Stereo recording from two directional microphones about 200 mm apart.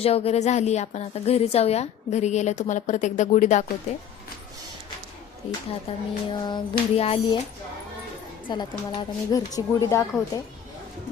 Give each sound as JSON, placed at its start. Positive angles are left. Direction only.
{"t": 0.0, "sound": "a woman's voice", "side_deg": 30}
{"t": 5.9, "sound": "a sound", "side_deg": 30}
{"t": 8.4, "sound": "a woman's voice", "side_deg": 25}